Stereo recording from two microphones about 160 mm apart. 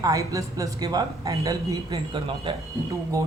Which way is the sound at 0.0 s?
20° right (ahead or behind).